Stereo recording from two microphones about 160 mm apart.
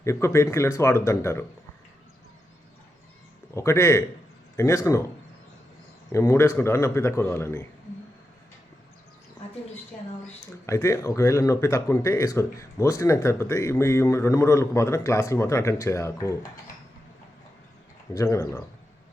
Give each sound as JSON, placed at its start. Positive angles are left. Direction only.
{"t": 0.0, "sound": "speech", "side_deg": 15}
{"t": 3.5, "sound": "speech", "side_deg": 15}
{"t": 6.1, "sound": "speech", "side_deg": 15}
{"t": 10.7, "sound": "speech", "side_deg": 20}
{"t": 18.1, "sound": "speech", "side_deg": 20}